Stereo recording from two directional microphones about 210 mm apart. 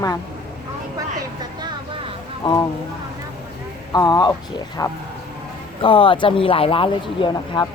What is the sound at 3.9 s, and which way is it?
Speech, 20° left (ahead or behind).